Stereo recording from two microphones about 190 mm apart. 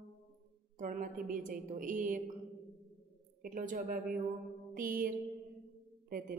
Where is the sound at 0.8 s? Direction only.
45° right (ahead or behind).